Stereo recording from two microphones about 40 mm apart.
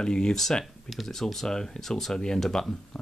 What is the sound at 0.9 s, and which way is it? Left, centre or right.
Speech, centre.